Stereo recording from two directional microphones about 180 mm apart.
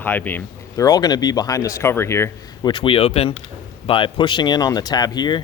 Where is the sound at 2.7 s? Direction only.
30° left (ahead or behind).